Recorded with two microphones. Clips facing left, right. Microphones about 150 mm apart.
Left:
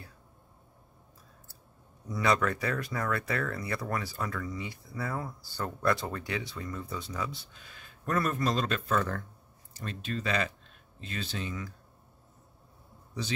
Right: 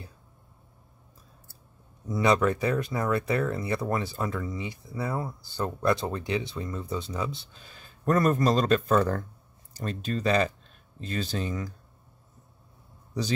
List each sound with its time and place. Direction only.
2.0 s speech: 20° right (ahead or behind); by 11.7 s 40° right (ahead or behind)